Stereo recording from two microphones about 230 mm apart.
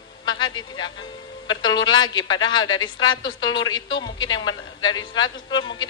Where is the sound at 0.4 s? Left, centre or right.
Centre.